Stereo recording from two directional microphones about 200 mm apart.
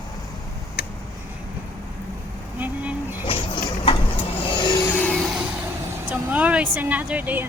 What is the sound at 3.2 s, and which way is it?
Vehicle, 25° left (ahead or behind).